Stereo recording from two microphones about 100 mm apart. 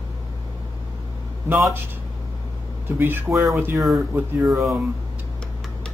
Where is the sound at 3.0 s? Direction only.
20° right (ahead or behind).